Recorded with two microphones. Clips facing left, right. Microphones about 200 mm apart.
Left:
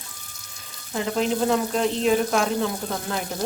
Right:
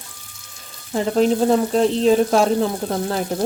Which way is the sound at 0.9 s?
35° right (ahead or behind).